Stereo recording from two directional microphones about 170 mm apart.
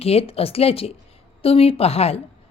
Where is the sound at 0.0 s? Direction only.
35° left (ahead or behind).